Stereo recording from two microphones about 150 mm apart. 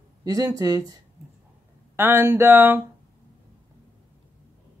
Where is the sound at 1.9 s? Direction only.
15° right (ahead or behind).